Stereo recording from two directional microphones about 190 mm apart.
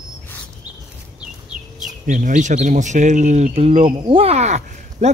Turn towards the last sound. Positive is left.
turn(degrees=-40)  # may be behind; listen again after turning